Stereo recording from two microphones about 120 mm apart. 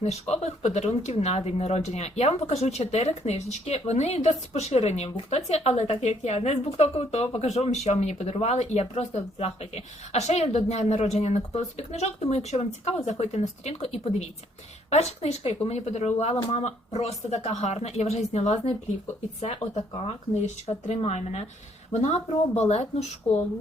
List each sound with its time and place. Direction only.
0.0 s speech: 65° left (ahead or behind)
22.5 s speech: 65° left (ahead or behind)